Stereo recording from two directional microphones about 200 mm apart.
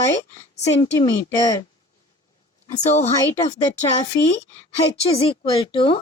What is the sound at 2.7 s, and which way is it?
Speech, 35° left (ahead or behind).